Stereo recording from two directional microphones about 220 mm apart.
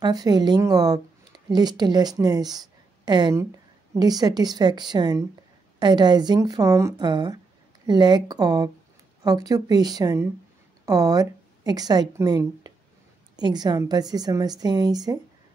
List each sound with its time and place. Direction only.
0.0 s a woman's voice: 15° right (ahead or behind)